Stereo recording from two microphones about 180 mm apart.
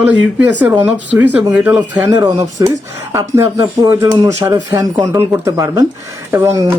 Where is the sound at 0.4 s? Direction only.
10° right (ahead or behind).